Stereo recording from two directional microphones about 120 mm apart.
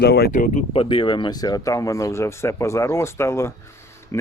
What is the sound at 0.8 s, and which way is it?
Speech, 40° left (ahead or behind).